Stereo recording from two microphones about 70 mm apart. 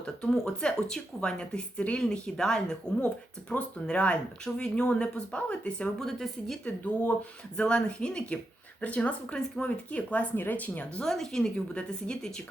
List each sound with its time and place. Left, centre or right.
0.0 s speech: centre
11.0 s speech: centre